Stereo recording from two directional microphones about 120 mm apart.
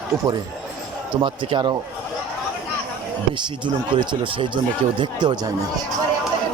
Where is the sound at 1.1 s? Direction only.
45° right (ahead or behind).